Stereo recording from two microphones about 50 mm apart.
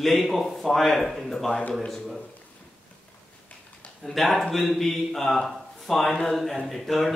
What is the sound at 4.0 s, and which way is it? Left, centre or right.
A man's voice, centre.